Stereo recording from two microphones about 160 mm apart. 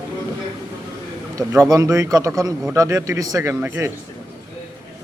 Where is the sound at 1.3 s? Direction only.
20° right (ahead or behind).